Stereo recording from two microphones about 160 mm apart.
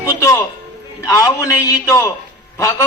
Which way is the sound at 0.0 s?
20° left (ahead or behind).